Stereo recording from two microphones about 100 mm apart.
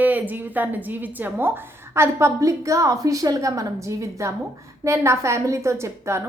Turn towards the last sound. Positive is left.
turn(degrees=-30)  # may be behind; listen again after turning